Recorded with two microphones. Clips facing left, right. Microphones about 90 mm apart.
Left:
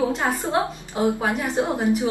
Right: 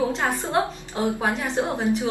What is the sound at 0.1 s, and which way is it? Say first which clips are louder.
A woman's voice: left 1 dB; 15° left (ahead or behind).